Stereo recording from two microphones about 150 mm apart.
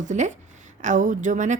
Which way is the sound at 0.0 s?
55° right (ahead or behind).